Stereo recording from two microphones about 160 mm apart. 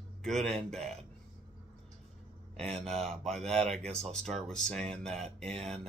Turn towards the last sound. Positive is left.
turn(degrees=5)  # may be behind; listen again after turning